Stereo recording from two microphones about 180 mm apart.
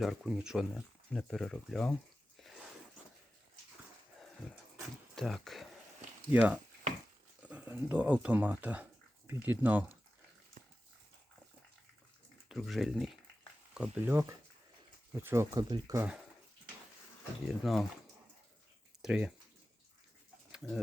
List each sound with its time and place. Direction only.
0.0 s speech: centre (ahead or behind)
2.4 s a sound: centre (ahead or behind)
4.4 s a sound: centre (ahead or behind)
5.1 s speech: centre (ahead or behind)
10.6 s dog: 55° right (ahead or behind)
12.5 s speech: centre (ahead or behind); by 16.0 s 20° right (ahead or behind)
17.6 s speech: centre (ahead or behind)
19.0 s speech: 5° right (ahead or behind)
20.5 s a sound: centre (ahead or behind)